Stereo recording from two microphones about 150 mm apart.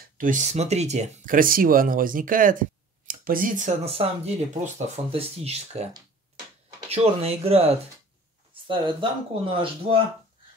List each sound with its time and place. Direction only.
0.2 s speech: 55° right (ahead or behind)
6.9 s speech: 45° right (ahead or behind)